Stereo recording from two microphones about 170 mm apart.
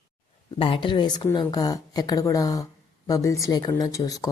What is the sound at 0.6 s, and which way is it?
Speech, 30° left (ahead or behind).